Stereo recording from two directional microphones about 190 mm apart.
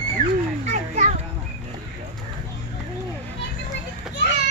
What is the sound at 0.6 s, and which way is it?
Children playing, 40° right (ahead or behind).